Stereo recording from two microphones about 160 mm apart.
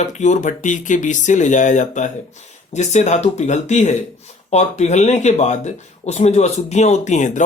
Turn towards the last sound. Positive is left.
turn(degrees=50)  # may be behind; listen again after turning